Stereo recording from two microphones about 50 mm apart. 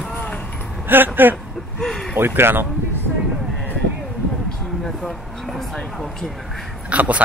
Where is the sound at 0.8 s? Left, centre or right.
Right.